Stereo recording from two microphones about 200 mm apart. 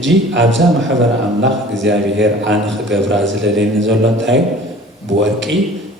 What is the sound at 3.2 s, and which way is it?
A man's voice, 65° right (ahead or behind).